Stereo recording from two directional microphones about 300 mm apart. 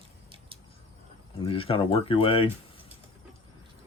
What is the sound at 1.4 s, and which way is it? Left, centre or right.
Speech, centre.